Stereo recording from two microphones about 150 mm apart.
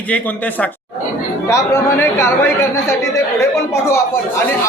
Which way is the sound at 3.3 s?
20° left (ahead or behind).